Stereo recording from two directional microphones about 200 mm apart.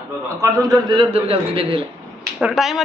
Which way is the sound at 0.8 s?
25° right (ahead or behind).